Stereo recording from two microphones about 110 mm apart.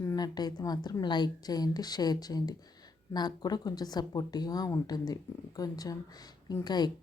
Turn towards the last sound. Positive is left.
turn(degrees=40)  # may be behind; listen again after turning